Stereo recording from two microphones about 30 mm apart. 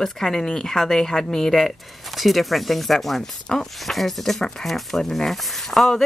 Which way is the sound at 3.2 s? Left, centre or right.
Centre.